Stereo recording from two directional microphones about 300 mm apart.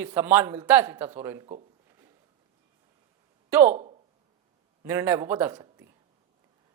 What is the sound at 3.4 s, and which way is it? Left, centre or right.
Speech, centre.